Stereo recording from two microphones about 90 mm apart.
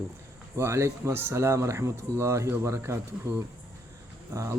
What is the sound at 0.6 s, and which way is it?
Speech, 30° right (ahead or behind).